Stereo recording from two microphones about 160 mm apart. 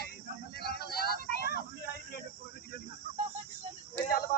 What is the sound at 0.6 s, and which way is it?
Vehicle, 75° left (ahead or behind).